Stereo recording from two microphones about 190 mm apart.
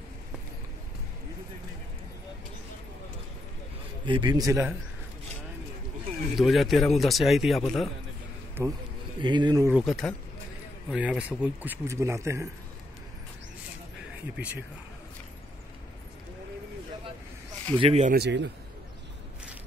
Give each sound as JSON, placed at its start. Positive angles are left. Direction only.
{"t": 4.0, "sound": "a man's voice", "side_deg": -25}
{"t": 6.3, "sound": "a man's voice", "side_deg": 0}
{"t": 8.6, "sound": "a man's voice", "side_deg": -15}
{"t": 9.7, "sound": "a man's voice", "side_deg": 0}
{"t": 17.7, "sound": "speech", "side_deg": -30}
{"t": 18.1, "sound": "a man's voice", "side_deg": -65}